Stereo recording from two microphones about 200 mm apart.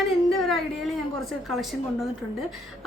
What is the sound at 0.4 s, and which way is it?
Speech, centre (ahead or behind).